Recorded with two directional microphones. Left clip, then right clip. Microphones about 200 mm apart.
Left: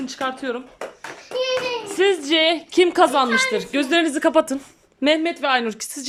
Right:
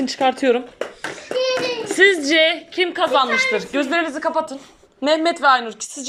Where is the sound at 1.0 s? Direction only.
40° right (ahead or behind).